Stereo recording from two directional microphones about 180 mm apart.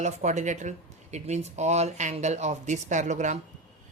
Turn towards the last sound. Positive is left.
turn(degrees=-40)  # may be behind; listen again after turning